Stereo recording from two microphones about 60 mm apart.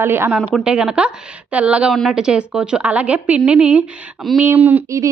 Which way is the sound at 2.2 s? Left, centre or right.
Centre.